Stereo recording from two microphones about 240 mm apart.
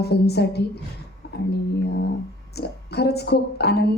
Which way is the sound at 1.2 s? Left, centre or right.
Left.